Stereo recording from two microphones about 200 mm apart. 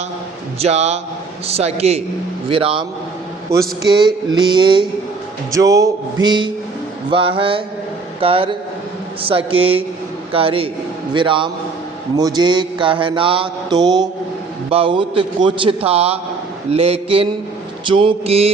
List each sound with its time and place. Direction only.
0.6 s a man's voice: 35° right (ahead or behind)
2.5 s mantra: 25° right (ahead or behind)
3.5 s a sound: 15° right (ahead or behind)
4.3 s mantra: 20° right (ahead or behind)
5.5 s a sound: 15° right (ahead or behind)
7.1 s mantra: 25° right (ahead or behind)